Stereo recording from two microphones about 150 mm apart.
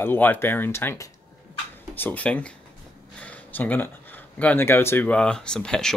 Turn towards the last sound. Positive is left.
turn(degrees=5)  # may be behind; listen again after turning